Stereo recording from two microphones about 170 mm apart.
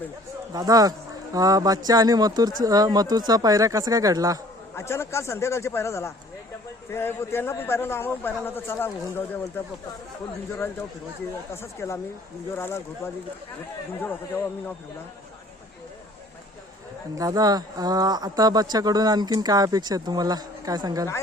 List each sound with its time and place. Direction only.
0.5 s speech: 20° right (ahead or behind)
4.7 s a man's voice: 15° left (ahead or behind)
11.5 s a man's voice: 15° left (ahead or behind)
14.3 s a man's voice: 10° left (ahead or behind)
17.2 s speech: 20° right (ahead or behind)